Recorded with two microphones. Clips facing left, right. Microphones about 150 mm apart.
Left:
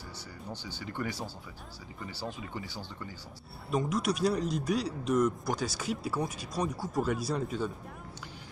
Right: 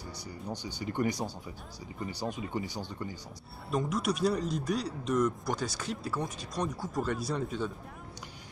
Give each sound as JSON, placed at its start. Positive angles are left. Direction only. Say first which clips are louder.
{"t": 0.5, "sound": "speech", "louder": "right 4 dB", "side_deg": -15}
{"t": 3.7, "sound": "speech", "louder": "left 1 dB", "side_deg": 0}